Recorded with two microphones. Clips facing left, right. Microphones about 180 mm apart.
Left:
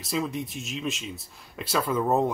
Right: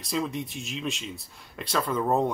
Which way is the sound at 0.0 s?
Centre (ahead or behind).